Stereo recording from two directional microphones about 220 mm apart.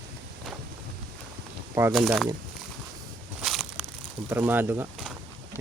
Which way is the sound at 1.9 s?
Centre (ahead or behind).